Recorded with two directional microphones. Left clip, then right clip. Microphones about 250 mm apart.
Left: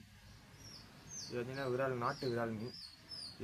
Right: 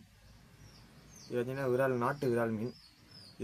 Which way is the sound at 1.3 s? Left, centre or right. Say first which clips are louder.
Right 7 dB; right.